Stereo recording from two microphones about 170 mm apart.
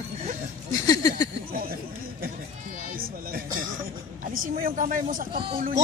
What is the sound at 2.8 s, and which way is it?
Speech, 55° right (ahead or behind).